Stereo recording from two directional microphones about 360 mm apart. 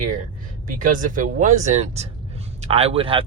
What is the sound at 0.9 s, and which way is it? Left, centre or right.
Speech, right.